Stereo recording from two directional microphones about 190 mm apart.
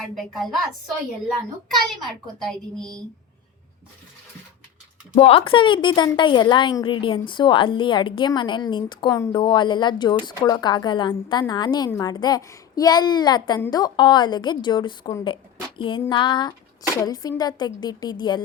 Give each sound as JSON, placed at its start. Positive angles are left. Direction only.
{"t": 2.4, "sound": "a woman's voice", "side_deg": 0}
{"t": 5.1, "sound": "a woman's voice", "side_deg": 30}